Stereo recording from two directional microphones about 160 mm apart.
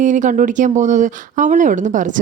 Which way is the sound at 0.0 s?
55° right (ahead or behind).